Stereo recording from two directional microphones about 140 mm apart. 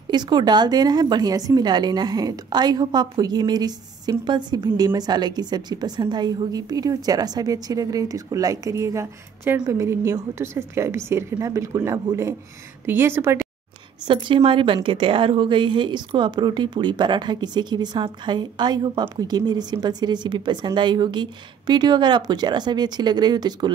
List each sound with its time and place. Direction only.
0.1 s a woman's voice: 30° right (ahead or behind)
14.0 s a woman's voice: 35° right (ahead or behind)